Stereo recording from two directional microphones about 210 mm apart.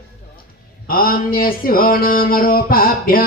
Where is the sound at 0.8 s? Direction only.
45° left (ahead or behind).